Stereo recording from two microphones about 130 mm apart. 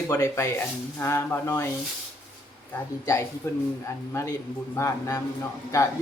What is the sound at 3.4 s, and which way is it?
A man's voice, 20° left (ahead or behind).